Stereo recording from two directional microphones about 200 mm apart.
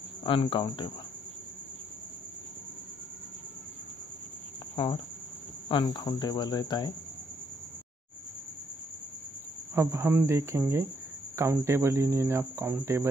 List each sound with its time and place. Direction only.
0.2 s speech: 25° left (ahead or behind)
4.7 s speech: 20° left (ahead or behind)
9.8 s speech: 10° right (ahead or behind)